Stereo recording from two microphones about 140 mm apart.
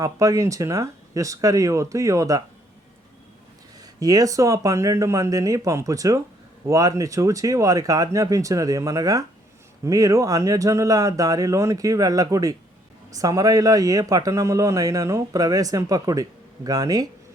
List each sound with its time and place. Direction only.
0.0 s a man's voice: 25° right (ahead or behind)
4.0 s a man's voice: 25° right (ahead or behind)